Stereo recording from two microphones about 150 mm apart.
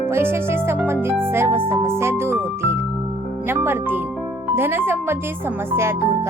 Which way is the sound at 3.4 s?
15° right (ahead or behind).